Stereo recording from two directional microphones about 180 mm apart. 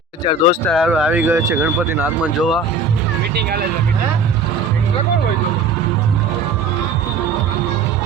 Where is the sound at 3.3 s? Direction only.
60° right (ahead or behind).